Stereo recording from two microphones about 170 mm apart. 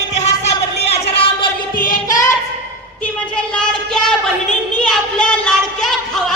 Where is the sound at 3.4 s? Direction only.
5° left (ahead or behind).